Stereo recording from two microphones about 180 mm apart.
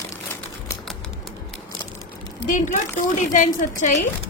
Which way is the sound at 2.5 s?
45° left (ahead or behind).